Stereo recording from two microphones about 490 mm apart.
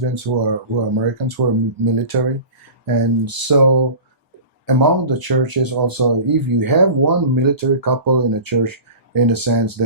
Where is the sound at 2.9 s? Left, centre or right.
Right.